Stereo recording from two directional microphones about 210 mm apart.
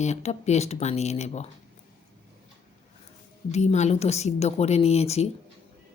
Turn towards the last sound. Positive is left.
turn(degrees=30)  # may be behind; listen again after turning